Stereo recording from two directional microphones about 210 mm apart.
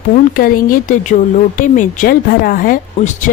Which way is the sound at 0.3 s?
40° left (ahead or behind).